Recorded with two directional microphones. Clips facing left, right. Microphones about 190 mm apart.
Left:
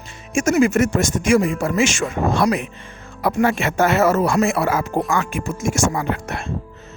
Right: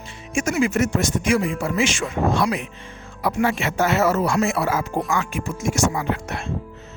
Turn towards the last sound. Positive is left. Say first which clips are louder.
# left 2 dB
turn(degrees=50)  # may be behind; listen again after turning